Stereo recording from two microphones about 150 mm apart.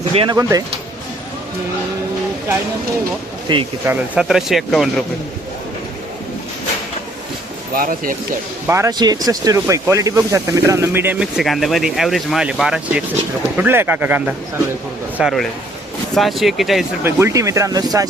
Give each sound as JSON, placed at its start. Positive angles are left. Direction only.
{"t": 0.1, "sound": "speech", "side_deg": -40}
{"t": 0.3, "sound": "speech", "side_deg": -25}
{"t": 3.5, "sound": "speech", "side_deg": -30}
{"t": 3.8, "sound": "speech", "side_deg": -5}
{"t": 7.7, "sound": "speech", "side_deg": -70}
{"t": 8.6, "sound": "speech", "side_deg": -20}
{"t": 15.2, "sound": "speech", "side_deg": 0}
{"t": 17.0, "sound": "speech", "side_deg": -15}